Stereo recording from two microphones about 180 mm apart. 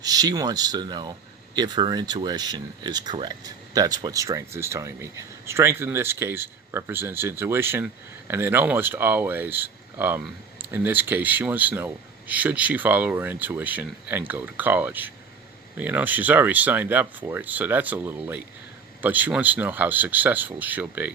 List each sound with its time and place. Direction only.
0.0 s speech: 20° right (ahead or behind)